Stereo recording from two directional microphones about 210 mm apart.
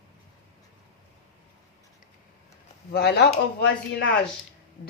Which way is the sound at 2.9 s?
50° left (ahead or behind).